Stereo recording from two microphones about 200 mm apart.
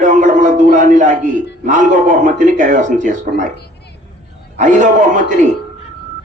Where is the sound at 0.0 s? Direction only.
40° right (ahead or behind).